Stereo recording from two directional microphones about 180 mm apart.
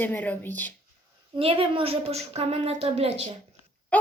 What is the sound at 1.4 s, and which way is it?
A woman's voice, 30° right (ahead or behind).